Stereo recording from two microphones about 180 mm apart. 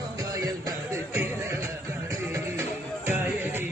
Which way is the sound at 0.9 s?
15° right (ahead or behind).